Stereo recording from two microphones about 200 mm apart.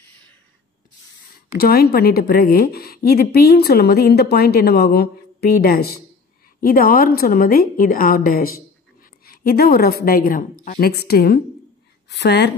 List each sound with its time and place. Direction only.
1.6 s a woman's voice: 50° left (ahead or behind)